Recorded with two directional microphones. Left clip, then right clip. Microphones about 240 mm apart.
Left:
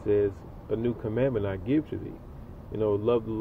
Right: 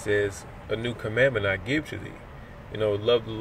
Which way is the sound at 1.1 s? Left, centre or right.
Right.